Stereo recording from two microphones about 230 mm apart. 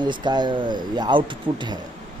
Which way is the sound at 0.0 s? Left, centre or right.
Centre.